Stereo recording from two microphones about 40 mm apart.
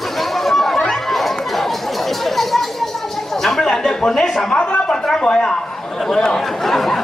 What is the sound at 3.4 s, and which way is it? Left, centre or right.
Speech, centre.